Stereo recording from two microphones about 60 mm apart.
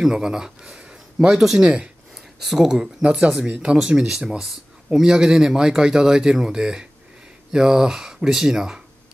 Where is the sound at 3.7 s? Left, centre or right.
Centre.